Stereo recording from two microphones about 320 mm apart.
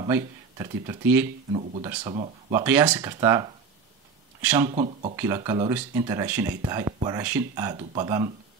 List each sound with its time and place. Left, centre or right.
0.0 s speech: centre
1.5 s speech: right
2.6 s speech: centre
4.6 s speech: right
5.1 s speech: centre